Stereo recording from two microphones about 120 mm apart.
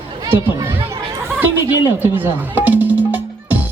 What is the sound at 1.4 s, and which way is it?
Music, 15° right (ahead or behind).